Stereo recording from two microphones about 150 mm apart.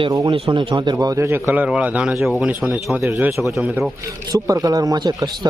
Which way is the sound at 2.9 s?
15° right (ahead or behind).